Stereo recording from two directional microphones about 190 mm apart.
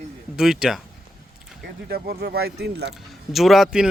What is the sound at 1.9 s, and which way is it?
Speech, 55° right (ahead or behind).